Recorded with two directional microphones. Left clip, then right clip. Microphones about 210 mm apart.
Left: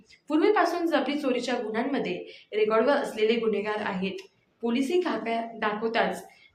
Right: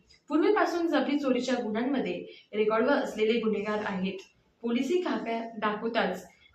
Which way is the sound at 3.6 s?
55° left (ahead or behind).